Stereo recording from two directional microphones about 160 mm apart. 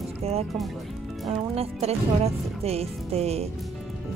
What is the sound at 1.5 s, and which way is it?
Speech, 40° right (ahead or behind).